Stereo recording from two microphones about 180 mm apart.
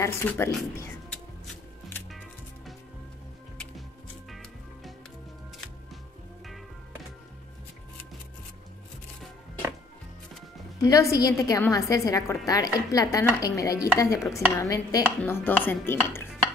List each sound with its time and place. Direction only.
0.0 s speech: 15° left (ahead or behind)
2.0 s music: centre (ahead or behind)
4.3 s music: centre (ahead or behind)
10.8 s a woman's voice: 20° left (ahead or behind)
13.9 s dishes: 20° left (ahead or behind)